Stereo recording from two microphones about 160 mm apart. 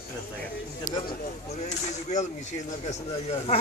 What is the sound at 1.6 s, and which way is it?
Speech, 45° left (ahead or behind).